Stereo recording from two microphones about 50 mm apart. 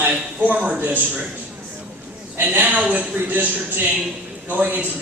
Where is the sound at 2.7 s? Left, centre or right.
Right.